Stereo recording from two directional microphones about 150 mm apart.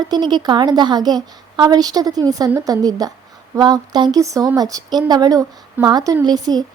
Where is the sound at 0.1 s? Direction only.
30° right (ahead or behind).